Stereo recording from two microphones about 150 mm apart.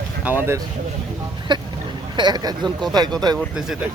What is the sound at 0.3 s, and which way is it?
Speech, 15° right (ahead or behind).